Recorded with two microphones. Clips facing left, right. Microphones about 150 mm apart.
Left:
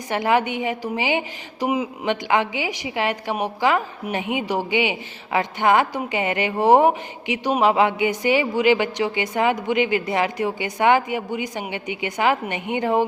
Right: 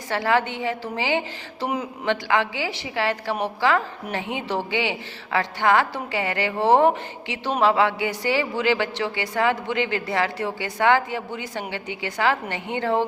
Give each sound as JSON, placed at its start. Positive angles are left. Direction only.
{"t": 0.1, "sound": "a woman's voice", "side_deg": 20}